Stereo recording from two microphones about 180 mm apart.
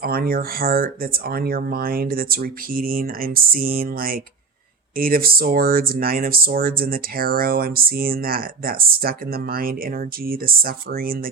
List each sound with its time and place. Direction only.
0.0 s speech: 60° right (ahead or behind)